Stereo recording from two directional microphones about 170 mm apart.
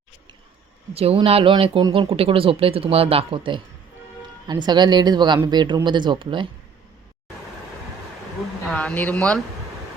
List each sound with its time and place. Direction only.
0.9 s speech: 35° right (ahead or behind)
8.6 s speech: 5° left (ahead or behind)